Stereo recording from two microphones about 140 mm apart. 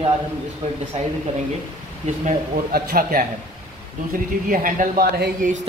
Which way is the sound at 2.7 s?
90° right.